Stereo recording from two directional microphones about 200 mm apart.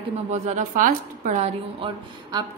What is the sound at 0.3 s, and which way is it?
A woman's voice, 35° right (ahead or behind).